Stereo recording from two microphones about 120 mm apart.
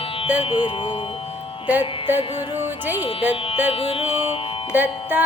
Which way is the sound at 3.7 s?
55° left (ahead or behind).